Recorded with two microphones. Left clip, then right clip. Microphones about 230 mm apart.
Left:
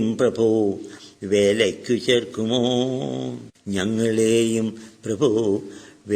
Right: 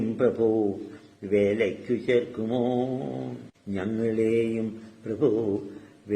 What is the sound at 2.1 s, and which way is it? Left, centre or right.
A man's voice, left.